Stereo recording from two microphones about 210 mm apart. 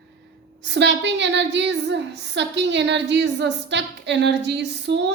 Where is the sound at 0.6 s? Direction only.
55° right (ahead or behind).